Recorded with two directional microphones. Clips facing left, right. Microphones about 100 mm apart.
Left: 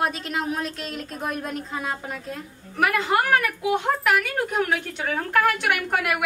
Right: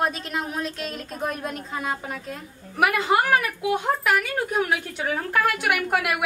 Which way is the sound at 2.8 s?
10° right (ahead or behind).